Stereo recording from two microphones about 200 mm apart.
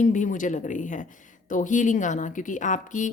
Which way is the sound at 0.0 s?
40° left (ahead or behind).